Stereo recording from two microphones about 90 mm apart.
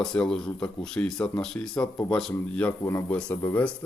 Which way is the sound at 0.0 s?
5° left (ahead or behind).